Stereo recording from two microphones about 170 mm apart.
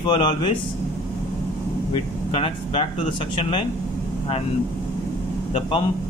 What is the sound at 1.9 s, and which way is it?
Speech, 35° left (ahead or behind).